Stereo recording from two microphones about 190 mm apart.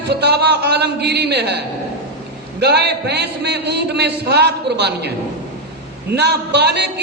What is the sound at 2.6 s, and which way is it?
A man's voice, 60° right (ahead or behind).